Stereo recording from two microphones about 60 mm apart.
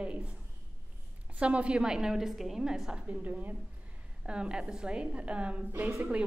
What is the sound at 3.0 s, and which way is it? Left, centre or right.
Speech, right.